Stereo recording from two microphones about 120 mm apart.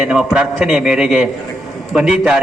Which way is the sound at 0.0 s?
5° right (ahead or behind).